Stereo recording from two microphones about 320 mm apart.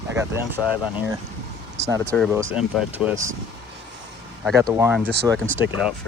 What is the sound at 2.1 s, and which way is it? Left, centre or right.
Speech, centre.